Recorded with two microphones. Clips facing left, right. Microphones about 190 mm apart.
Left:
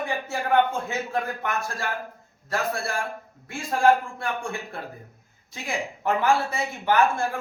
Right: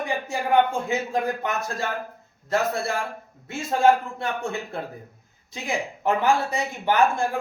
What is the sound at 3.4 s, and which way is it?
A man's voice, 25° right (ahead or behind).